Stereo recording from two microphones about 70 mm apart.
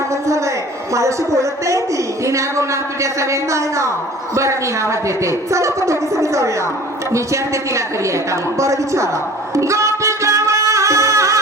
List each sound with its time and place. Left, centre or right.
0.1 s a sound: right
0.9 s a woman's voice: right
9.6 s music: right